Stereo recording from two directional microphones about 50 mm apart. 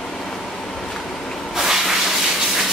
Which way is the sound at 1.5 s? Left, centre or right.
Centre.